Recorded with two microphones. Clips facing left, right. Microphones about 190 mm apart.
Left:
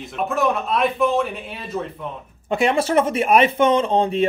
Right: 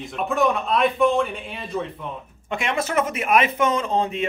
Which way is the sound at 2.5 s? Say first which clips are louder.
Left 6 dB; 35° left (ahead or behind).